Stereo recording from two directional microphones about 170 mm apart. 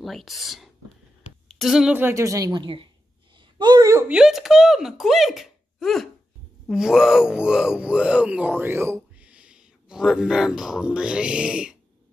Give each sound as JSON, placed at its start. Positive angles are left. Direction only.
{"t": 0.0, "sound": "a woman's voice", "side_deg": 0}
{"t": 4.1, "sound": "speech", "side_deg": -5}